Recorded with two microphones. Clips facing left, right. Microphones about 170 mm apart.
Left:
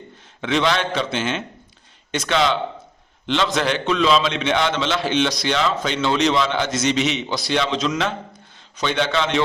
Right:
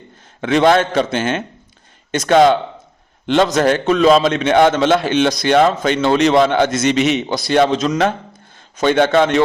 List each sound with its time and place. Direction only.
0.4 s a man's voice: 50° right (ahead or behind)